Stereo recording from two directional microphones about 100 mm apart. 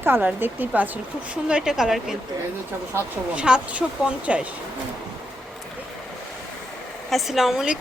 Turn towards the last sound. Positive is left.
turn(degrees=-5)  # may be behind; listen again after turning